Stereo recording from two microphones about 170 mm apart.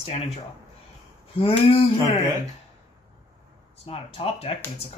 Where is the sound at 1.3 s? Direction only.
30° left (ahead or behind).